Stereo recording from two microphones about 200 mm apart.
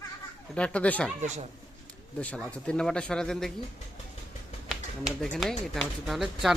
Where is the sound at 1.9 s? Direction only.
5° left (ahead or behind).